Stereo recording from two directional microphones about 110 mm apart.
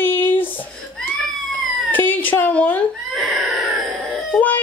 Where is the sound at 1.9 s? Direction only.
15° left (ahead or behind).